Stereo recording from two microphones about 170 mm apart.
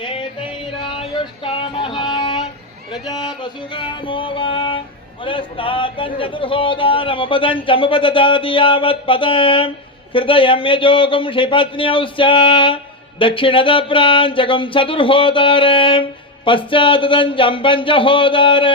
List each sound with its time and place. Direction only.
0.0 s yodeling: 30° left (ahead or behind)
0.9 s music: 30° left (ahead or behind)
5.2 s speech: 30° left (ahead or behind)